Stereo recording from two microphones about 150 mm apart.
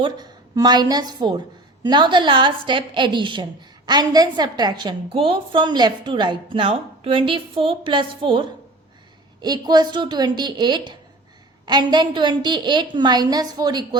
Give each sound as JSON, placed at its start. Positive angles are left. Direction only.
{"t": 0.0, "sound": "a woman's voice", "side_deg": -30}